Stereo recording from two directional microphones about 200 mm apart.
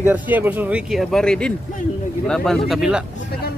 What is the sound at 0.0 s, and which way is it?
Speech, 10° right (ahead or behind).